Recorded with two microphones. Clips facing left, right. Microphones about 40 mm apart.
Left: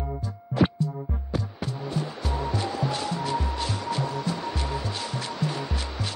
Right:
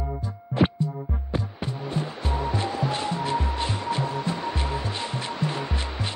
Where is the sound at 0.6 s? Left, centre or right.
Right.